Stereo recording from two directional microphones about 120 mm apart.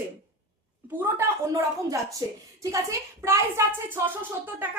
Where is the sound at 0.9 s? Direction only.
25° right (ahead or behind).